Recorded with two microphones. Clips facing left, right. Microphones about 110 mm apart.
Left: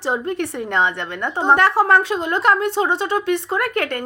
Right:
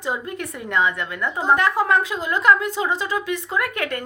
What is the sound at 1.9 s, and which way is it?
Speech, 70° left (ahead or behind).